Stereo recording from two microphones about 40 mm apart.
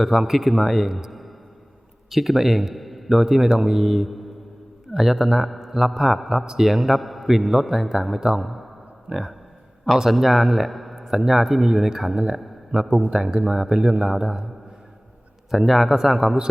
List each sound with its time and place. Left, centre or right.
0.0 s a man's voice: centre
8.4 s a sound: centre
9.1 s speech: right
10.0 s speech: centre
12.7 s a man's voice: right
13.4 s speech: centre
15.4 s a man's voice: centre